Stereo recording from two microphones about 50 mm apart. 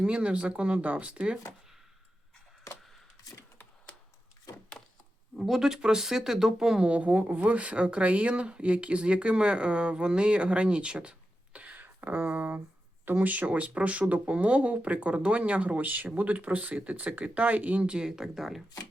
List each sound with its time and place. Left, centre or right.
0.0 s speech: right
5.4 s speech: centre
6.8 s speech: right
11.8 s speech: right
17.8 s speech: centre